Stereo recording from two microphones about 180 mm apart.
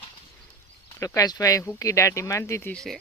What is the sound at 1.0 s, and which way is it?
Speech, 20° left (ahead or behind).